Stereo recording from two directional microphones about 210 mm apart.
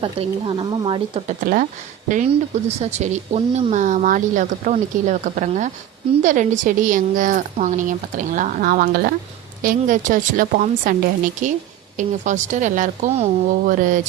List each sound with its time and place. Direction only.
0.0 s speech: 25° right (ahead or behind)
2.6 s speech: 30° right (ahead or behind)